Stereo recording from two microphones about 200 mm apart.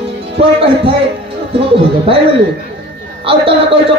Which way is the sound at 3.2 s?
25° right (ahead or behind).